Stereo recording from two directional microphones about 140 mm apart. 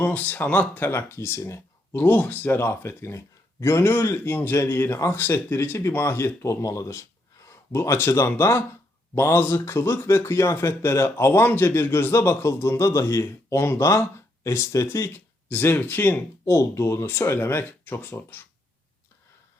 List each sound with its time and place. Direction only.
0.0 s speech: 10° left (ahead or behind)